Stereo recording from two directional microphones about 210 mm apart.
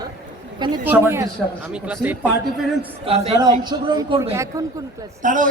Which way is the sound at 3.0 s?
25° right (ahead or behind).